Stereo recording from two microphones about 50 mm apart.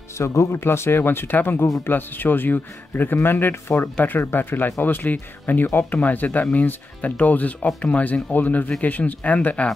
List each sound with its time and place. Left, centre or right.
0.2 s speech: left
5.9 s speech: left